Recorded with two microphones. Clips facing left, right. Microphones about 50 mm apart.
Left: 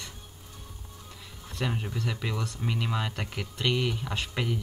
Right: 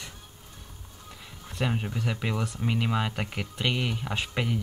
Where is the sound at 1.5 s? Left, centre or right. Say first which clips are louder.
Right 2 dB; centre.